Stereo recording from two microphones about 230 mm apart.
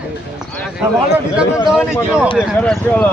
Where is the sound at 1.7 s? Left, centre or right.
Centre.